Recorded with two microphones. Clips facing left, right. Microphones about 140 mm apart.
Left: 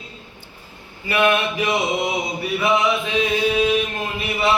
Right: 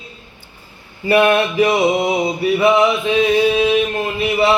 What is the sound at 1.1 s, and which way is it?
Mantra, 35° right (ahead or behind).